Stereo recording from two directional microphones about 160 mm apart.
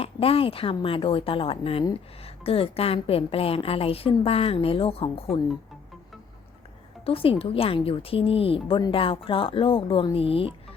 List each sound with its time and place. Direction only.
0.0 s a woman's voice: 35° left (ahead or behind)
7.0 s a woman's voice: 35° left (ahead or behind)